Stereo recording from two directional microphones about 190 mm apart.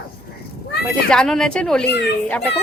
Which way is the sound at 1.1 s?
5° left (ahead or behind).